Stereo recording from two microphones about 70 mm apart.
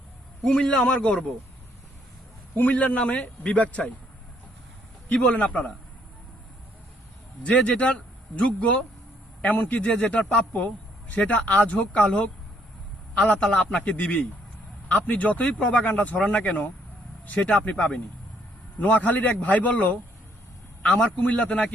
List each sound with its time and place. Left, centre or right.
0.4 s a man's voice: centre
2.6 s speech: left
5.0 s speech: centre
7.4 s a man's voice: centre
13.4 s a man's voice: centre
13.8 s a man's voice: left
20.8 s a man's voice: centre